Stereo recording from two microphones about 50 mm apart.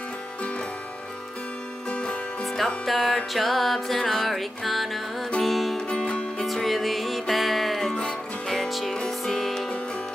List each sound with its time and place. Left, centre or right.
1.9 s music: left
2.4 s music: centre
5.8 s music: centre
6.4 s music: centre
7.9 s music: centre